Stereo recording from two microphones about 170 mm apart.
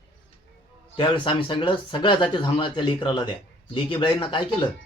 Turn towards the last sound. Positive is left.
turn(degrees=30)  # may be behind; listen again after turning